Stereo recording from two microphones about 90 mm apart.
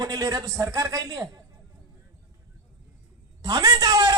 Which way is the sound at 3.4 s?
50° right (ahead or behind).